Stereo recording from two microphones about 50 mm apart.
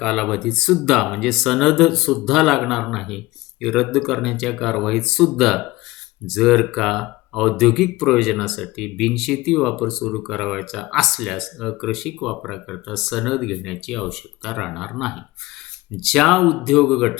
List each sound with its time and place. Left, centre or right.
0.0 s speech: centre